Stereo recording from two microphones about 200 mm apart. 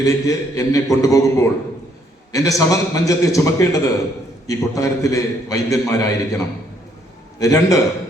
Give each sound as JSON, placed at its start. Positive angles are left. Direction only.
{"t": 0.0, "sound": "a man's voice", "side_deg": 15}